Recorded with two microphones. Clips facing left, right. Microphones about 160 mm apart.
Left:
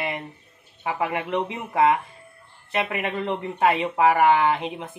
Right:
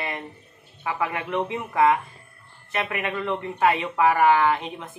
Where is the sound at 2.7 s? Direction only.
25° left (ahead or behind).